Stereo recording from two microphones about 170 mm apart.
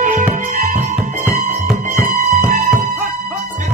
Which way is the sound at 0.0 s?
50° right (ahead or behind).